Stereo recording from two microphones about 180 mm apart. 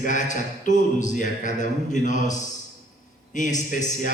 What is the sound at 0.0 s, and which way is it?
A man's voice, 45° left (ahead or behind).